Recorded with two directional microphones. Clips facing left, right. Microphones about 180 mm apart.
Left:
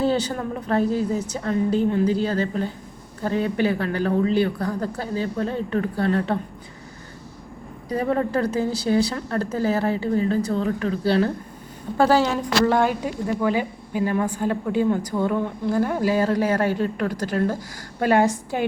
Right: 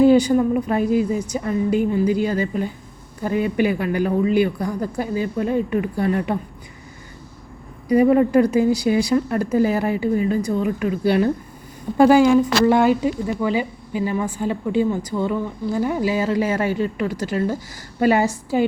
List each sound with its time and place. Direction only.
0.0 s speech: 10° right (ahead or behind)
7.9 s speech: 15° right (ahead or behind)
13.5 s speech: 50° left (ahead or behind)
14.1 s speech: 5° right (ahead or behind)